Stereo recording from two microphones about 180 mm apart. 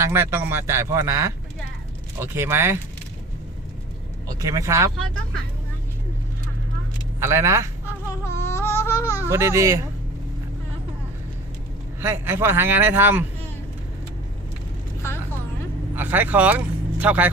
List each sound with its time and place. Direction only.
0.0 s speech: 15° right (ahead or behind)
4.4 s speech: 20° right (ahead or behind)
7.2 s speech: 15° right (ahead or behind)
8.2 s baby cry: 15° left (ahead or behind)
9.2 s speech: 15° right (ahead or behind)
11.9 s speech: 10° right (ahead or behind)
16.0 s speech: 10° right (ahead or behind)